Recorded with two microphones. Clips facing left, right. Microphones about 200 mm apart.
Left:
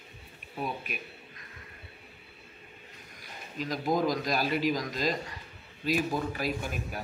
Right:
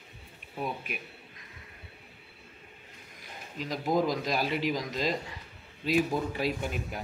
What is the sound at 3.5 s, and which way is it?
Speech, 25° right (ahead or behind).